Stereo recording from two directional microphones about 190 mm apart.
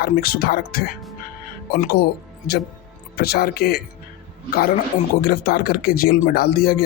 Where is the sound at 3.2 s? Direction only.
55° left (ahead or behind).